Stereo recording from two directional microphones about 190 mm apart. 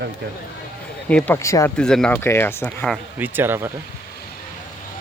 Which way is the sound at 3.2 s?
10° right (ahead or behind).